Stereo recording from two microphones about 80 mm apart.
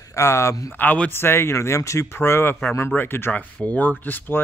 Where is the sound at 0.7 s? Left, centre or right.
Centre.